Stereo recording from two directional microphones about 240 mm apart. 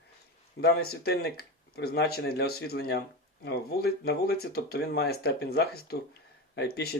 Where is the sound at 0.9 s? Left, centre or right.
Left.